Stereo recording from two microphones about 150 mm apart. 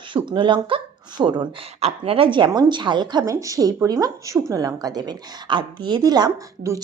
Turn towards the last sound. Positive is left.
turn(degrees=-25)  # may be behind; listen again after turning